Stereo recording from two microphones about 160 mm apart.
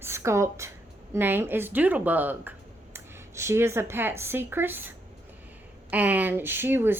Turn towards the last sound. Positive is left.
turn(degrees=-15)  # may be behind; listen again after turning